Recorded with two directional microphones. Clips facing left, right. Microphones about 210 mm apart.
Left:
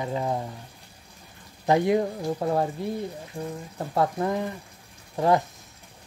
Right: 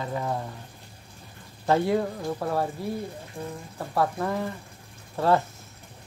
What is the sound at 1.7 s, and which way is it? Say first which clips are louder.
Speech: left 2 dB; 15° left (ahead or behind).